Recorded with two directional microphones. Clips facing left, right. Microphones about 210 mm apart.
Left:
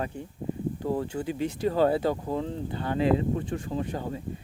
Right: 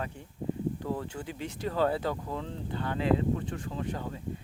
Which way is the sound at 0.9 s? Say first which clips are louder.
Left 6 dB; 25° left (ahead or behind).